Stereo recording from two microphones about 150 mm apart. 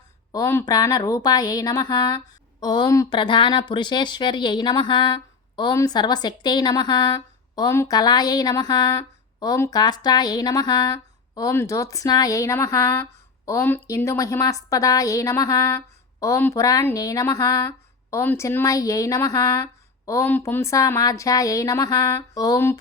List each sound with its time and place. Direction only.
0.3 s speech: 20° left (ahead or behind)